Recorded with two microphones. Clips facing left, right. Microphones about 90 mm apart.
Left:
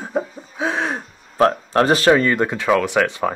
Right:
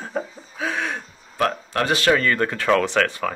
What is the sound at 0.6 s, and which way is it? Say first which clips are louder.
Gasp: left 4 dB; 30° left (ahead or behind).